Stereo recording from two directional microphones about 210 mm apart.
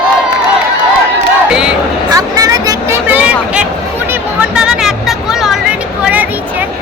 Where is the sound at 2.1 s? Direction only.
15° right (ahead or behind).